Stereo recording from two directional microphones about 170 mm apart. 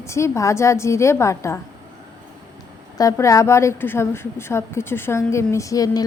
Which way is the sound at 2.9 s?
20° left (ahead or behind).